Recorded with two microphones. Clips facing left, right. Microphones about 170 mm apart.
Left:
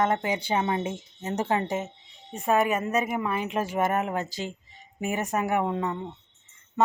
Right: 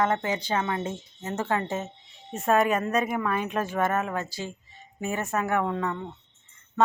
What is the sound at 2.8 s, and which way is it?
Speech, 5° left (ahead or behind).